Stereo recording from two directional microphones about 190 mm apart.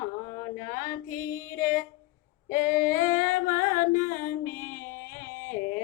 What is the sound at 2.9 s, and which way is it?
Music, 45° left (ahead or behind).